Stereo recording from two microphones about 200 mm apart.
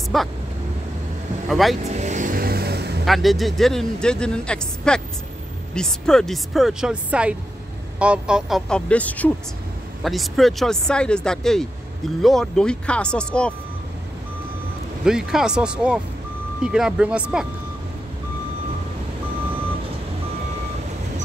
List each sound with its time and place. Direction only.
0.1 s a man's voice: centre (ahead or behind)
1.5 s a man's voice: centre (ahead or behind)
1.9 s vehicle: 35° right (ahead or behind); by 3.0 s 55° right (ahead or behind)
3.1 s a man's voice: centre (ahead or behind)
15.0 s a man's voice: 5° right (ahead or behind)